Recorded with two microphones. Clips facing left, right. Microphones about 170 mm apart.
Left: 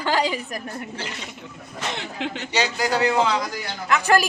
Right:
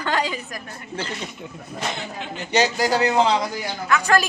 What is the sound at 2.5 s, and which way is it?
Speech, 40° right (ahead or behind).